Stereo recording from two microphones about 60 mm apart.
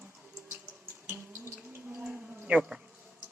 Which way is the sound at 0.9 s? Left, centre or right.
Right.